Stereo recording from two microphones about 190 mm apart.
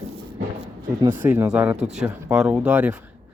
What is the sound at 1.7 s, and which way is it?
Speech, 35° right (ahead or behind).